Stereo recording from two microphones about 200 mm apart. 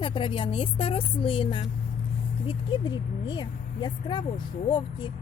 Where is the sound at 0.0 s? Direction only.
25° left (ahead or behind).